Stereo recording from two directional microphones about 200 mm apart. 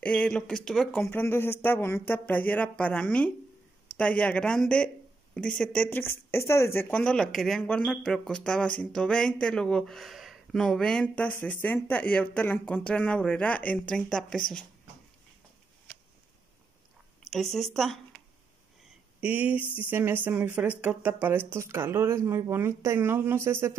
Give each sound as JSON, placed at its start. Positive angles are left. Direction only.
{"t": 0.0, "sound": "speech", "side_deg": 5}
{"t": 17.2, "sound": "speech", "side_deg": 0}
{"t": 19.2, "sound": "speech", "side_deg": -10}